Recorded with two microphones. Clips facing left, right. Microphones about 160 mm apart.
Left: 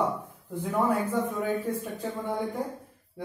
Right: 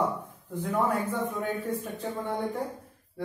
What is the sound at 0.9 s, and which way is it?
Speech, 5° left (ahead or behind).